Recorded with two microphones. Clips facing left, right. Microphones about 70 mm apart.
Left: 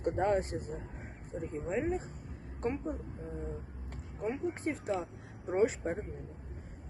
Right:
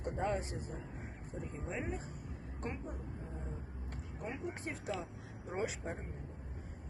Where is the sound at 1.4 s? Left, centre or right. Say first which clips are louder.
Left 8 dB; left.